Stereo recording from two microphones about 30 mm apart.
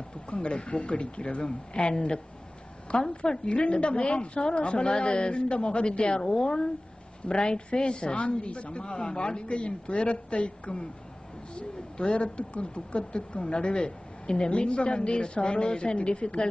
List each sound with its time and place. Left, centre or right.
0.3 s a woman's voice: left
6.1 s a woman's voice: left